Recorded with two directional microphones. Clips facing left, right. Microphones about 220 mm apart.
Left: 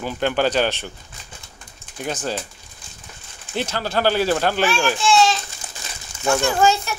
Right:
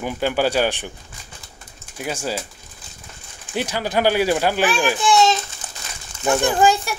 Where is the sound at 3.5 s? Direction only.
15° right (ahead or behind).